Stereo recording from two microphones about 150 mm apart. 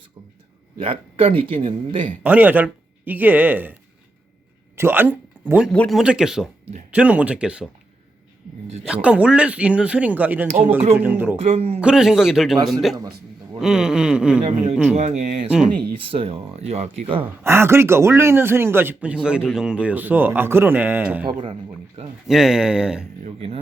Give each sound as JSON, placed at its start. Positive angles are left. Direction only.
{"t": 0.8, "sound": "speech", "side_deg": -40}
{"t": 2.2, "sound": "a man's voice", "side_deg": -10}
{"t": 4.8, "sound": "speech", "side_deg": -15}
{"t": 5.7, "sound": "speech", "side_deg": 10}
{"t": 6.0, "sound": "a man's voice", "side_deg": -5}
{"t": 8.8, "sound": "a man's voice", "side_deg": -5}
{"t": 11.4, "sound": "speech", "side_deg": -40}
{"t": 11.8, "sound": "a man's voice", "side_deg": -5}
{"t": 15.2, "sound": "speech", "side_deg": -50}
{"t": 15.4, "sound": "a man's voice", "side_deg": -5}
{"t": 16.0, "sound": "speech", "side_deg": -40}
{"t": 17.2, "sound": "a man's voice", "side_deg": -15}
{"t": 22.3, "sound": "a man's voice", "side_deg": 0}
{"t": 23.2, "sound": "speech", "side_deg": -40}